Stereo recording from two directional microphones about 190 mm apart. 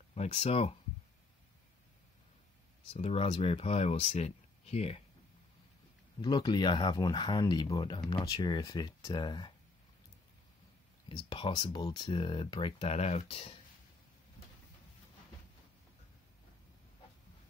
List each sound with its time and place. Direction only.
0.1 s speech: 35° left (ahead or behind)
2.9 s speech: 30° left (ahead or behind)
6.2 s speech: 20° left (ahead or behind)
11.1 s speech: 25° left (ahead or behind)